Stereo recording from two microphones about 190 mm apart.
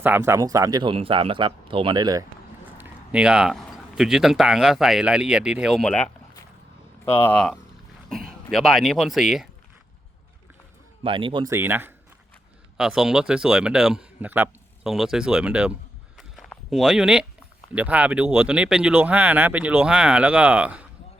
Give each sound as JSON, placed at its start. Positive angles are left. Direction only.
{"t": 0.0, "sound": "speech", "side_deg": -10}
{"t": 2.7, "sound": "a man's voice", "side_deg": -10}
{"t": 11.0, "sound": "speech", "side_deg": -25}
{"t": 11.5, "sound": "a man's voice", "side_deg": -10}
{"t": 16.1, "sound": "walk", "side_deg": 0}
{"t": 17.7, "sound": "speech", "side_deg": -10}